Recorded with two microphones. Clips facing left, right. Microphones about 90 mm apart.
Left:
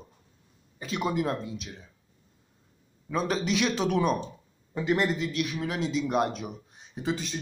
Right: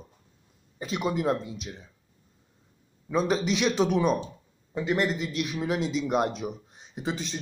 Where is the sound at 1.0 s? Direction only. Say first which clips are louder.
Right 1 dB; 5° left (ahead or behind).